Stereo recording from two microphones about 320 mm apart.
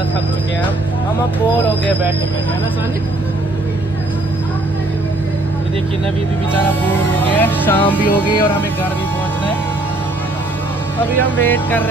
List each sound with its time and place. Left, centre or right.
7.3 s speech: centre
11.0 s speech: centre